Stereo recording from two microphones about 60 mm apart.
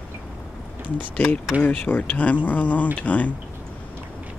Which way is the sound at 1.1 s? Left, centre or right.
Left.